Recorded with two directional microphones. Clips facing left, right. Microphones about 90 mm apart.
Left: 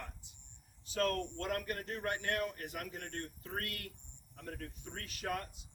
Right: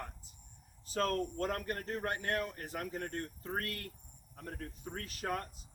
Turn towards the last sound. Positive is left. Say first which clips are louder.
# right 2 dB
turn(degrees=-40)  # may be behind; listen again after turning